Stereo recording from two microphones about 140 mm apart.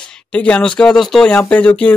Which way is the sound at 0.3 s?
10° left (ahead or behind).